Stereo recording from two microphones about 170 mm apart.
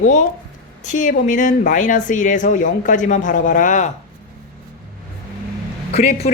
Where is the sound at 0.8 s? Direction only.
45° left (ahead or behind).